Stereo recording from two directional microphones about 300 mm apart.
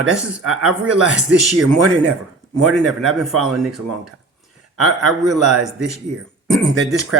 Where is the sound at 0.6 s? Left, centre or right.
Centre.